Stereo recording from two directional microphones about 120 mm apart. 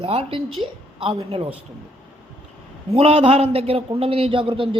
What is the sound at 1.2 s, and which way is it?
Speech, 60° right (ahead or behind).